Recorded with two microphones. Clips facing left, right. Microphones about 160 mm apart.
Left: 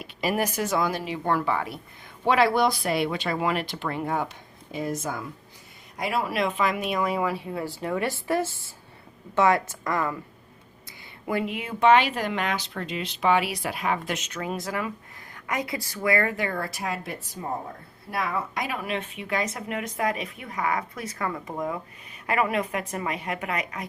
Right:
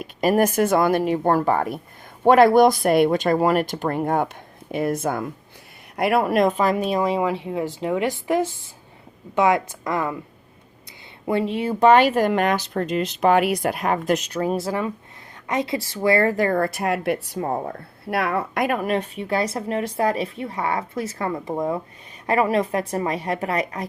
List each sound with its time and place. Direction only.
0.0 s speech: 45° right (ahead or behind); by 10.2 s 20° right (ahead or behind)
11.3 s a woman's voice: 30° right (ahead or behind)